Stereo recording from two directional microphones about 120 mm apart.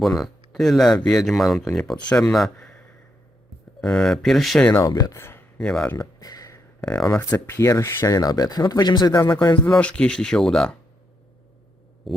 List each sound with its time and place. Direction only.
0.0 s speech: centre (ahead or behind)
4.7 s speech: 30° left (ahead or behind)
5.5 s speech: 5° left (ahead or behind)
6.0 s a sound: 30° left (ahead or behind)
6.8 s speech: 10° left (ahead or behind)
7.6 s speech: 25° left (ahead or behind)
9.7 s speech: 5° left (ahead or behind)
12.1 s a sound: centre (ahead or behind)